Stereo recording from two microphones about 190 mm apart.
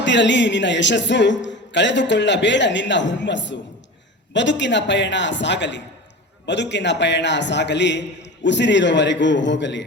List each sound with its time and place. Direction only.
0.0 s a man's voice: 70° left (ahead or behind)